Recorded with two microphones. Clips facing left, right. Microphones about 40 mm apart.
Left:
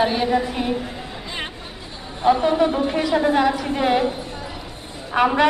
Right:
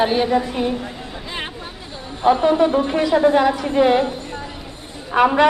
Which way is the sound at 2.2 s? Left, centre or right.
Centre.